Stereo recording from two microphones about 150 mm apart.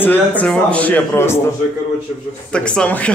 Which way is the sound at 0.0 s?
10° left (ahead or behind).